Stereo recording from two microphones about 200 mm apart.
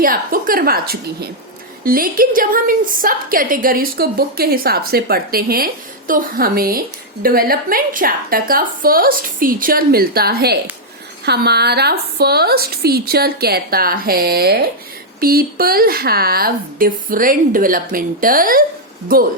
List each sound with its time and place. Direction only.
0.0 s a woman's voice: 45° right (ahead or behind)